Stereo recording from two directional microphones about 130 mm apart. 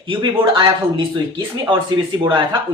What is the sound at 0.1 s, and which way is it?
Speech, 40° right (ahead or behind).